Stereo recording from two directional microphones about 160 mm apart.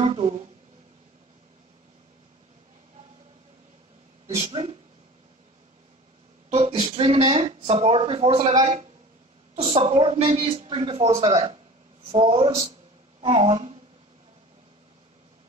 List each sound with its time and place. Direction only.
0.0 s speech: 35° right (ahead or behind)
4.4 s speech: 35° right (ahead or behind)
6.7 s speech: 35° right (ahead or behind)
9.6 s speech: 35° right (ahead or behind)